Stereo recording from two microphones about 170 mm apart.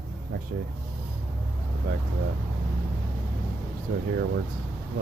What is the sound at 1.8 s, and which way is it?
Speech, 65° right (ahead or behind).